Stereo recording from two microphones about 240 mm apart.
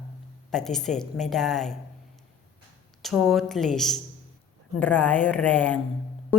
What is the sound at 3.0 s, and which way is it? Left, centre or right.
A woman's voice, centre.